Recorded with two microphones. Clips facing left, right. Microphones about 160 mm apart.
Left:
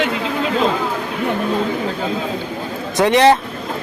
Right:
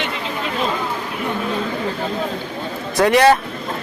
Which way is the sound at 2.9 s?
20° left (ahead or behind).